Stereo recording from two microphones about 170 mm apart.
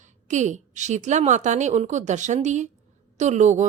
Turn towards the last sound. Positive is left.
turn(degrees=-45)  # may be behind; listen again after turning